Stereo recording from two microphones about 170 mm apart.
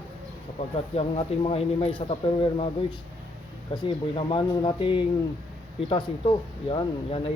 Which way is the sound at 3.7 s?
25° left (ahead or behind).